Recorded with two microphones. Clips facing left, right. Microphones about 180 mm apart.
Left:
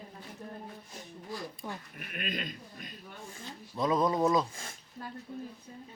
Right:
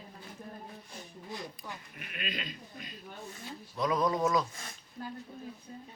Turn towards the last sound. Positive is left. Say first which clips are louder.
# left 2 dB
turn(degrees=25)  # may be behind; listen again after turning